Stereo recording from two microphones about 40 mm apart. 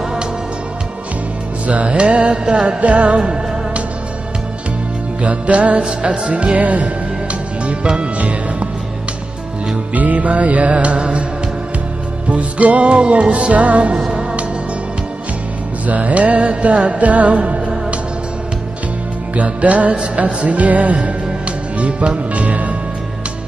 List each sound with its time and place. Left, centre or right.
0.0 s music: centre
1.6 s music: right
5.2 s music: right
9.9 s music: right
12.3 s music: right
14.2 s music: right
15.9 s music: right
19.3 s music: right
20.9 s music: right